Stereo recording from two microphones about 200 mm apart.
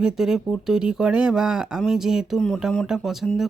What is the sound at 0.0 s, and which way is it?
Speech, centre (ahead or behind).